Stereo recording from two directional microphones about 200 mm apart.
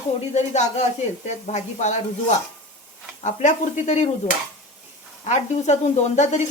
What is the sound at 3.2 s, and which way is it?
Speech, 35° left (ahead or behind).